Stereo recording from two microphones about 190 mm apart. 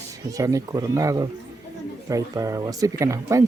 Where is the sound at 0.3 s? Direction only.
15° right (ahead or behind).